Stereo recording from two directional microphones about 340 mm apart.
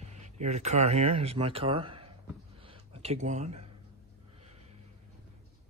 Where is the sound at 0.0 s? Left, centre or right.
Centre.